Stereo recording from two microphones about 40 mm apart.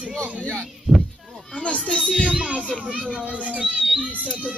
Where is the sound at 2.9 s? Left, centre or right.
Right.